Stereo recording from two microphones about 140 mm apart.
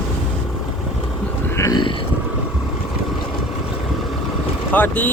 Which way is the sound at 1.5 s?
20° left (ahead or behind).